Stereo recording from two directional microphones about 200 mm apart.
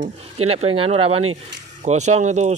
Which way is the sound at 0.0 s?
30° right (ahead or behind).